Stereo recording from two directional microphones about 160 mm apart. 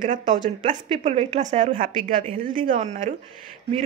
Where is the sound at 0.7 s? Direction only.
40° right (ahead or behind).